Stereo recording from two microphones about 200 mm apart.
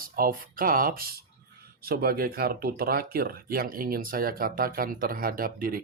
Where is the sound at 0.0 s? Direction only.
45° right (ahead or behind).